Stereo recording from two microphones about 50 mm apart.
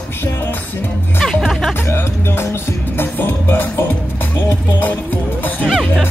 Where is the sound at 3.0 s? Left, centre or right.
Left.